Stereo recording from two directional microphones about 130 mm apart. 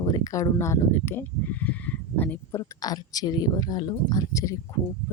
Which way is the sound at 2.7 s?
30° left (ahead or behind).